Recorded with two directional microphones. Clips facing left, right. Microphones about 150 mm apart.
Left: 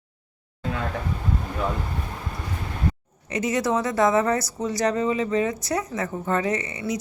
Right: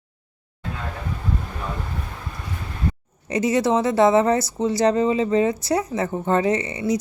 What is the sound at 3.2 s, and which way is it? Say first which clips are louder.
Speech: right 4 dB; 30° right (ahead or behind).